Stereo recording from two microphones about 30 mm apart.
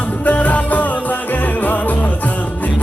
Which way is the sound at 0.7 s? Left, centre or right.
Left.